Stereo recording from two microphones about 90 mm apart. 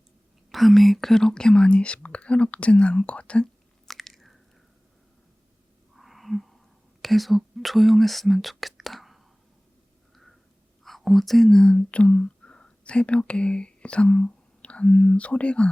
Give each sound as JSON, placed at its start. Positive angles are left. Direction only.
{"t": 0.5, "sound": "speech", "side_deg": 0}
{"t": 6.0, "sound": "wheeze", "side_deg": 0}
{"t": 7.0, "sound": "speech", "side_deg": 0}
{"t": 10.8, "sound": "speech", "side_deg": 0}